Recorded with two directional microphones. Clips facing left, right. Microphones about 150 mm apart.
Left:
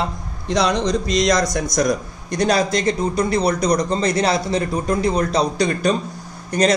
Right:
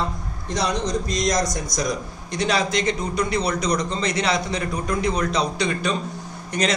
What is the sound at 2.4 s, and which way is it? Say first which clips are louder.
A man's voice: left 4 dB; 40° left (ahead or behind).